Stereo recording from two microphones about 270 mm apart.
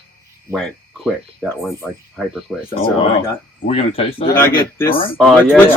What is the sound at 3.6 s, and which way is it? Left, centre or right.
Speech, left.